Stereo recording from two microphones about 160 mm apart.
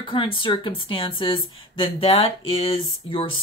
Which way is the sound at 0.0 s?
30° left (ahead or behind).